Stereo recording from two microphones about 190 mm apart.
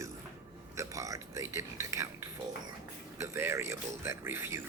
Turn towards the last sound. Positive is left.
turn(degrees=-15)  # may be behind; listen again after turning